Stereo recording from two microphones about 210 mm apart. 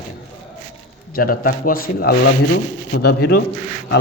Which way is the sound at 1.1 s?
45° left (ahead or behind).